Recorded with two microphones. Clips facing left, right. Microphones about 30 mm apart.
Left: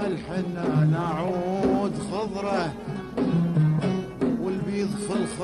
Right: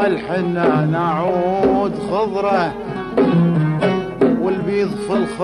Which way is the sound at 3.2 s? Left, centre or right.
Right.